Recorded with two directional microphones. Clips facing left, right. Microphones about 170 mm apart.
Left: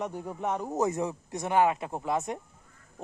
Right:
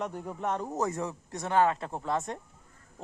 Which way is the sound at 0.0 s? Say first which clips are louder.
Left 1 dB; 5° left (ahead or behind).